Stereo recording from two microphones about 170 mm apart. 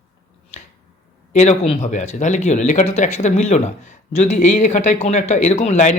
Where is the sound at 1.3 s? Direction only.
45° left (ahead or behind).